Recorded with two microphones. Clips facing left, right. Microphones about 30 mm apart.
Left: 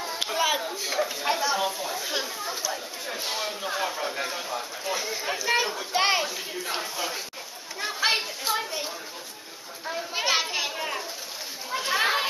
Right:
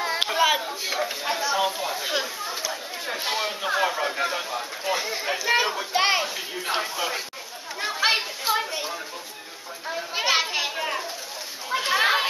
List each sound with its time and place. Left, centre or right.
0.2 s a sound: centre
1.2 s a sound: centre
1.6 s speech: right
2.4 s chatter: centre
3.1 s speech: right
6.6 s speech: right
7.8 s children playing: centre